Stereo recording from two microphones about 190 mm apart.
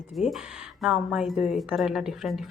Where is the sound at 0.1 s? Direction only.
Centre (ahead or behind).